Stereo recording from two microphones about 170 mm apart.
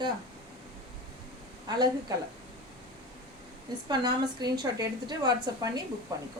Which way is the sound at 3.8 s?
25° right (ahead or behind).